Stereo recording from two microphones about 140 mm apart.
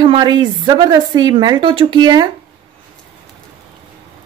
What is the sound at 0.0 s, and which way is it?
A woman's voice, 30° right (ahead or behind).